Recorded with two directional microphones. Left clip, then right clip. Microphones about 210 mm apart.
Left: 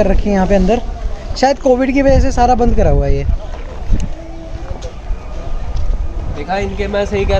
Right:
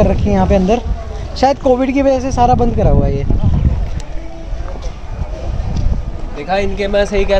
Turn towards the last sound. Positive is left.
turn(degrees=-45)  # may be behind; listen again after turning